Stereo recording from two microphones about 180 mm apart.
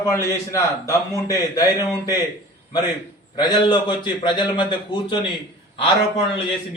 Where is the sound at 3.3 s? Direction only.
25° left (ahead or behind).